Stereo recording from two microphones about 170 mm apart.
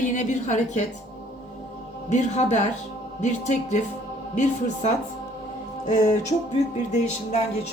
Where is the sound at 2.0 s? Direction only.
45° left (ahead or behind).